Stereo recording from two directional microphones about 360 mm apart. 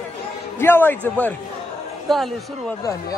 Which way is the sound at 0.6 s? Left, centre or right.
Centre.